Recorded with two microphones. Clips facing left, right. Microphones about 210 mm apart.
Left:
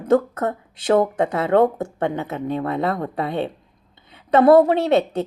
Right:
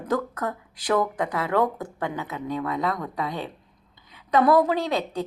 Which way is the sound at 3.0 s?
60° left (ahead or behind).